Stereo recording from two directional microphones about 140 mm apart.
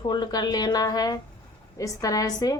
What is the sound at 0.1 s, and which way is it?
A woman's voice, 30° left (ahead or behind).